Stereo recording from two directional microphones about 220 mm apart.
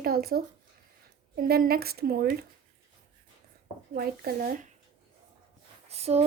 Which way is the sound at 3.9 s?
40° right (ahead or behind).